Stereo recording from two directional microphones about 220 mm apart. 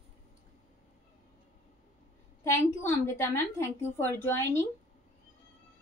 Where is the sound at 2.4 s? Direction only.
10° left (ahead or behind).